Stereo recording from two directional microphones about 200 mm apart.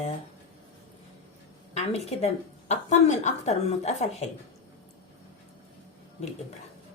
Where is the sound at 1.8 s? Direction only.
30° left (ahead or behind).